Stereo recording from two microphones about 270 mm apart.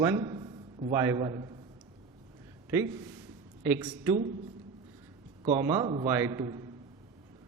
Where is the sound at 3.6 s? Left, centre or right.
Centre.